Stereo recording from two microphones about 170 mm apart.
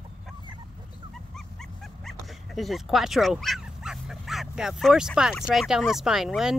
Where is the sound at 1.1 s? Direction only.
Centre (ahead or behind).